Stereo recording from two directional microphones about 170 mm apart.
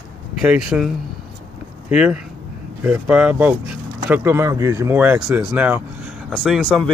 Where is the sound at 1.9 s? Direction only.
5° right (ahead or behind).